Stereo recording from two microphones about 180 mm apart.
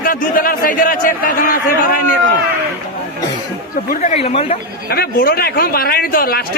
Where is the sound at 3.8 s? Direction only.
40° left (ahead or behind).